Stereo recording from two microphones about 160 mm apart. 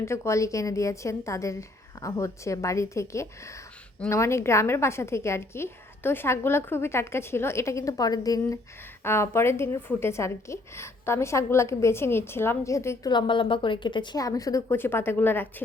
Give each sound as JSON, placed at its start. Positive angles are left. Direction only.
{"t": 0.0, "sound": "a woman's voice", "side_deg": 20}